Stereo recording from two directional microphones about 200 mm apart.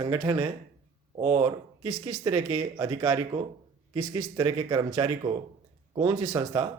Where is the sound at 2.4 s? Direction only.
35° right (ahead or behind).